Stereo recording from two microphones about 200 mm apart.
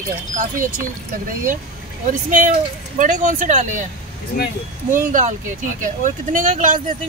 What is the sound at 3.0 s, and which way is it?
Speech, 40° right (ahead or behind).